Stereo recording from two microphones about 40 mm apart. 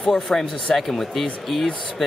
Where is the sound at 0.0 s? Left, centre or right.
Centre.